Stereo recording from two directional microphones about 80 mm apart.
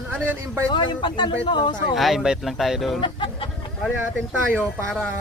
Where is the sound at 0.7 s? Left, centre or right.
Left.